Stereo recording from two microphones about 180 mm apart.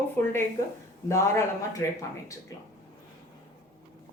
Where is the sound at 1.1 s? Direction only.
15° left (ahead or behind).